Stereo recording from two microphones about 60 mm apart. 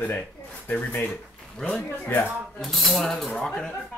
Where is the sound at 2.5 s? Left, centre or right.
Centre.